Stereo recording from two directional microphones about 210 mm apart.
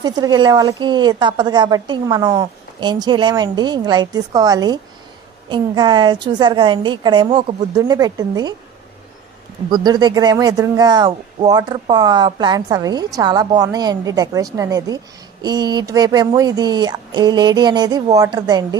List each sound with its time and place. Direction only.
0.0 s speech: 20° right (ahead or behind)
9.7 s speech: 20° right (ahead or behind)